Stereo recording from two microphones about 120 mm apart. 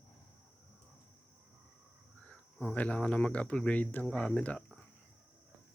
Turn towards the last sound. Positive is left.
turn(degrees=10)  # may be behind; listen again after turning